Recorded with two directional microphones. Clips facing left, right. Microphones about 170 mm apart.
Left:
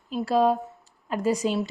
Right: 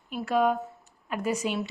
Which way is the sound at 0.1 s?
35° left (ahead or behind).